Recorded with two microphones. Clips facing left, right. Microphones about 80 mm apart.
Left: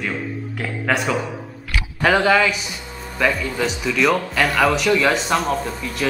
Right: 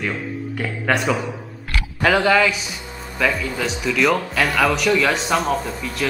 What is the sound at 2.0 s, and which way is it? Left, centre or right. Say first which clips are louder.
A man's voice: even; centre.